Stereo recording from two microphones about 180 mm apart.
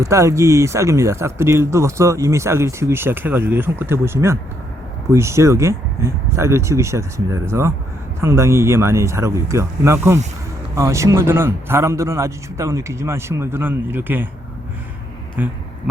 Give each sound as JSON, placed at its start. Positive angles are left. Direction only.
{"t": 0.0, "sound": "speech", "side_deg": -15}
{"t": 15.4, "sound": "speech", "side_deg": -10}